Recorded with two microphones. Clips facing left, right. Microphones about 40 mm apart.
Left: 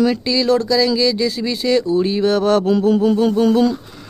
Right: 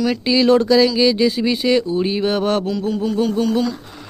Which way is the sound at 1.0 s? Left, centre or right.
Right.